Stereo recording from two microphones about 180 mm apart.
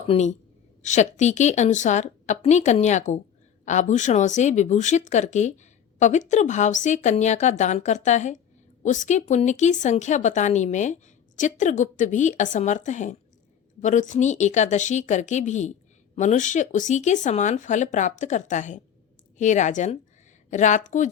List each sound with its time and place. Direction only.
0.1 s speech: 40° left (ahead or behind)